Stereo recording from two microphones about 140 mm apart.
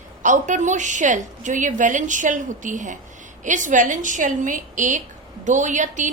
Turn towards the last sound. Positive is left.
turn(degrees=-65)  # may be behind; listen again after turning